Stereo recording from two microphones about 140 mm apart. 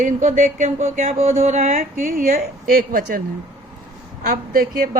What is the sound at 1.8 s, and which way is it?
Speech, 85° right.